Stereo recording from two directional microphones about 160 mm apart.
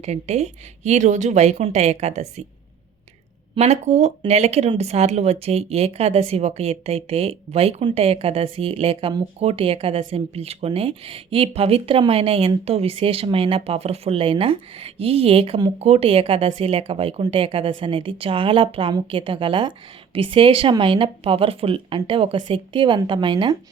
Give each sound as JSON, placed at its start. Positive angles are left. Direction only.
{"t": 0.0, "sound": "speech", "side_deg": -45}
{"t": 3.5, "sound": "speech", "side_deg": -45}